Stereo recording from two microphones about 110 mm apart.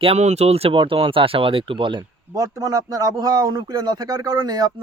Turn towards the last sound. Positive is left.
turn(degrees=-35)  # may be behind; listen again after turning